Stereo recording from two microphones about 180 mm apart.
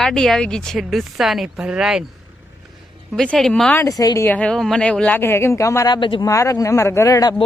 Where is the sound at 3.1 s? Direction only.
5° left (ahead or behind).